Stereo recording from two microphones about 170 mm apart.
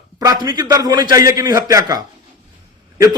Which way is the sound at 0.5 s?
25° right (ahead or behind).